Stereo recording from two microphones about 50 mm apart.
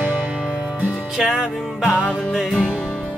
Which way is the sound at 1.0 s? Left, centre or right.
Centre.